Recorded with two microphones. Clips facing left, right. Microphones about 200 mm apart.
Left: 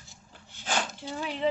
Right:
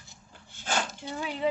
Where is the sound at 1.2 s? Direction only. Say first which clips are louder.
Even; 10° right (ahead or behind).